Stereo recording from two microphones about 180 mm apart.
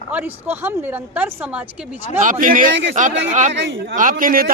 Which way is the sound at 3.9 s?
50° right (ahead or behind).